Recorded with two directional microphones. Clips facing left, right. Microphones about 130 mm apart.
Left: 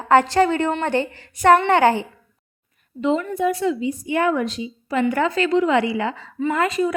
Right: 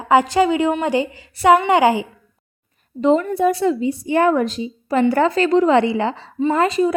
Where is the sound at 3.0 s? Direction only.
40° right (ahead or behind).